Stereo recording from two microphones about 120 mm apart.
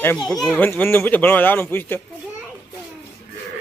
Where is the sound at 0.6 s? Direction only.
15° left (ahead or behind).